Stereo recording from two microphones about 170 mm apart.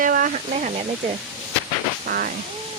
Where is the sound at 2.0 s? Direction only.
65° right (ahead or behind).